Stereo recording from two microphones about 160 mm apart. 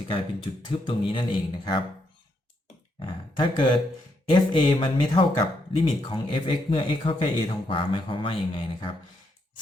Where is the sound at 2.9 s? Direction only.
30° left (ahead or behind).